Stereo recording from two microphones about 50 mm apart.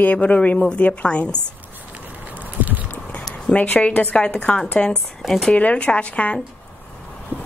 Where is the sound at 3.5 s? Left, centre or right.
Left.